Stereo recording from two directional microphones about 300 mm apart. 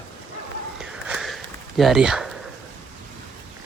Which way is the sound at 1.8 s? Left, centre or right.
Centre.